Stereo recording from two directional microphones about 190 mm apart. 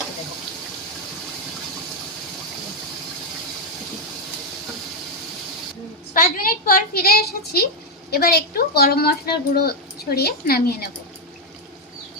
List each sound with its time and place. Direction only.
6.1 s a woman's voice: 50° left (ahead or behind)